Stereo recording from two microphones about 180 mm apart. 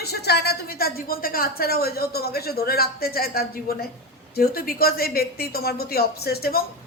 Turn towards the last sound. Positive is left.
turn(degrees=60)  # may be behind; listen again after turning